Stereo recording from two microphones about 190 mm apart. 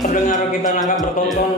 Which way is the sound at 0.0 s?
45° left (ahead or behind).